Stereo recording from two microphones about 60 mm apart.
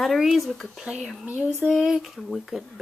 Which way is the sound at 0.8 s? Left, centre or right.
Centre.